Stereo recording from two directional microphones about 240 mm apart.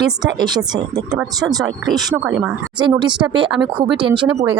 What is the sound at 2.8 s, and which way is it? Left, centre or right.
Speech, centre.